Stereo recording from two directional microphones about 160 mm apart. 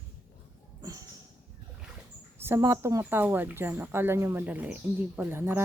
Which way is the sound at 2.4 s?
20° right (ahead or behind).